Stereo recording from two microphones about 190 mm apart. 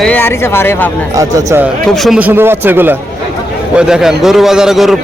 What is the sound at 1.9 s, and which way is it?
A man's voice, centre (ahead or behind).